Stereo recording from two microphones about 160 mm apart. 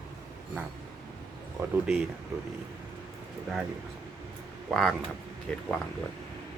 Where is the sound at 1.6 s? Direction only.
15° right (ahead or behind).